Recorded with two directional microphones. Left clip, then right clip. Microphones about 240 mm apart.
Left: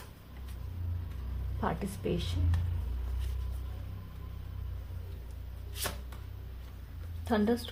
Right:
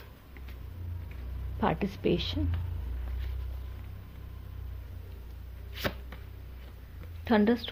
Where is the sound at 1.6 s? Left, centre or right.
Right.